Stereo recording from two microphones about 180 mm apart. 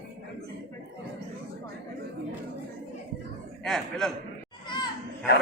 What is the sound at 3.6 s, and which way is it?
Speech, centre (ahead or behind).